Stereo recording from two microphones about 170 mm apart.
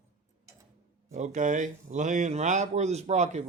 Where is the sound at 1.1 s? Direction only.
45° right (ahead or behind).